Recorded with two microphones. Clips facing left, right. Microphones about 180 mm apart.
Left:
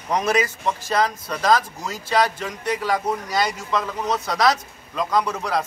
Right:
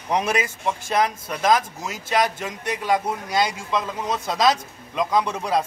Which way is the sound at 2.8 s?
20° right (ahead or behind).